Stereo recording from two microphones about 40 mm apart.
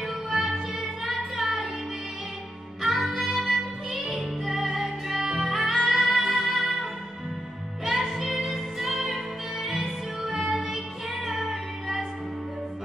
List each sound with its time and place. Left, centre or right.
0.0 s music: centre
2.8 s music: centre
3.9 s music: right
4.5 s music: centre